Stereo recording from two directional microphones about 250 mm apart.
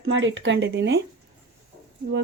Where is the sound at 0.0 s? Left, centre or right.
Right.